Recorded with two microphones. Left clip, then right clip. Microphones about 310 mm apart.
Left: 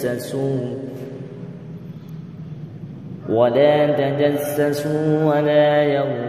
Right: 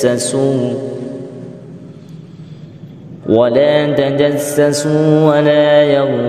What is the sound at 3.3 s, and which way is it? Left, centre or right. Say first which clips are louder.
Mantra: right 5 dB; right.